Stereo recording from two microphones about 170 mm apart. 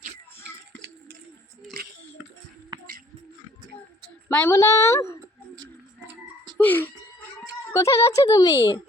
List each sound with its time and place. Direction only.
2.7 s music: 25° right (ahead or behind)
4.4 s a woman's voice: 15° left (ahead or behind)
6.6 s speech: 10° left (ahead or behind)